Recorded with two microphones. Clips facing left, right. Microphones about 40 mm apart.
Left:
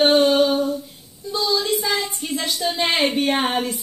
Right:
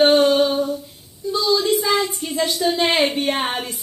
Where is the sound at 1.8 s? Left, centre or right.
Right.